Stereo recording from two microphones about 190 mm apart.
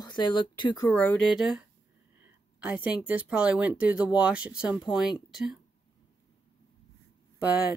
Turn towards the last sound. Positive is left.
turn(degrees=-10)  # may be behind; listen again after turning